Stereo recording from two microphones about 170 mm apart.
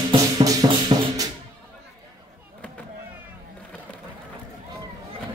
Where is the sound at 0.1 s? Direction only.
20° right (ahead or behind).